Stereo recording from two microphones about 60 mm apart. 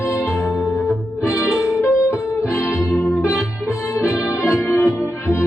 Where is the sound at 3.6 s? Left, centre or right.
Left.